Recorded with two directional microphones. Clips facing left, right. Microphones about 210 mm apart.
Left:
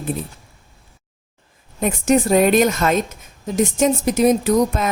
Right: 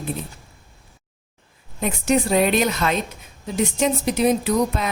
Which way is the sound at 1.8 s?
45° left (ahead or behind).